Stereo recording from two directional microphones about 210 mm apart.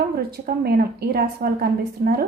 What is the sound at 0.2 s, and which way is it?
A woman's voice, 50° right (ahead or behind).